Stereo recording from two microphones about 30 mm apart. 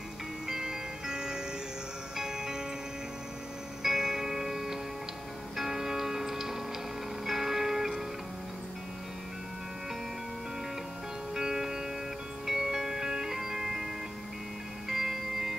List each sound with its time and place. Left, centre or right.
0.5 s music: centre
3.8 s music: centre
11.3 s music: centre
14.9 s music: centre